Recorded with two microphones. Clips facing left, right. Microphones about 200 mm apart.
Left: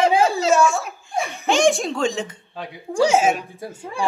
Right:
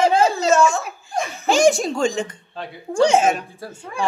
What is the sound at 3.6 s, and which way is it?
Speech, 25° left (ahead or behind).